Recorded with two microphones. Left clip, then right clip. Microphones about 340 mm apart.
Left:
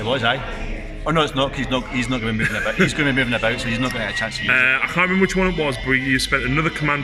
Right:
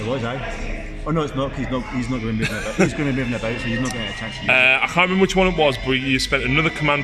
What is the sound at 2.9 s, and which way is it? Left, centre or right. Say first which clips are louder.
Speech: left 4 dB; left.